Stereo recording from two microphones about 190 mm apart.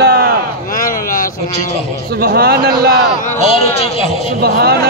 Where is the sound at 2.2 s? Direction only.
55° right (ahead or behind).